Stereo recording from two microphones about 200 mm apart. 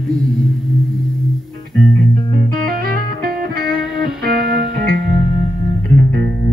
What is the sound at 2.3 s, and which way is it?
Music, 45° right (ahead or behind).